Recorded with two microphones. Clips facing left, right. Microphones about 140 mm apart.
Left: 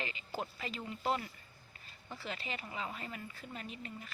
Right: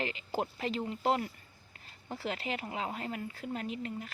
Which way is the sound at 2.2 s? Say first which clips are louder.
Right 7 dB; 75° right (ahead or behind).